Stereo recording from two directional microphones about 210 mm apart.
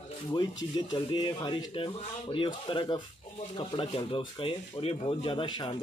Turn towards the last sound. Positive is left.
turn(degrees=25)  # may be behind; listen again after turning